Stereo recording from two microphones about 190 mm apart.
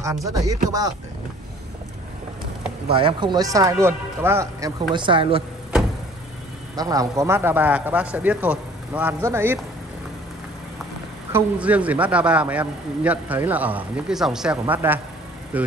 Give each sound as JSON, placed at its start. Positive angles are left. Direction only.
{"t": 0.0, "sound": "a man's voice", "side_deg": -15}
{"t": 2.9, "sound": "a man's voice", "side_deg": -25}
{"t": 4.9, "sound": "a woman's voice", "side_deg": -25}
{"t": 6.8, "sound": "a man's voice", "side_deg": -20}
{"t": 11.3, "sound": "a man's voice", "side_deg": -5}